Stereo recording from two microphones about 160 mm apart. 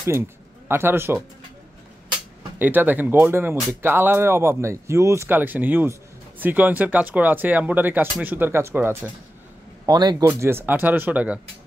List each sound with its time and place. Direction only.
0.7 s speech: 15° right (ahead or behind)
2.6 s speech: 10° right (ahead or behind)
9.8 s a man's voice: 25° right (ahead or behind)
10.2 s speech: 15° right (ahead or behind)